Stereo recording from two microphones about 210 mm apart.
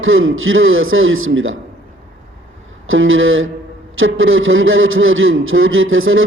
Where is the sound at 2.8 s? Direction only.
70° right (ahead or behind).